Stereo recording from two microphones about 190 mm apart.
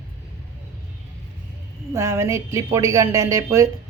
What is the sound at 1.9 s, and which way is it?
A woman's voice, 15° right (ahead or behind).